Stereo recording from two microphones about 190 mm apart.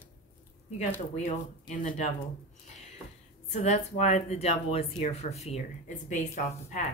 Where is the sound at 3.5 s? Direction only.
40° left (ahead or behind).